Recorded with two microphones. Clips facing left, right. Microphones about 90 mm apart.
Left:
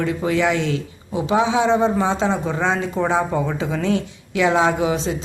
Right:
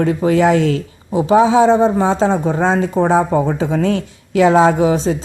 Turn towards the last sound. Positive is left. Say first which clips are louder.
# right 6 dB
turn(degrees=-40)  # may be behind; listen again after turning